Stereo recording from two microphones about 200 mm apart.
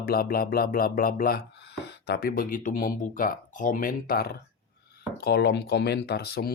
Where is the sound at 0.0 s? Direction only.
50° left (ahead or behind).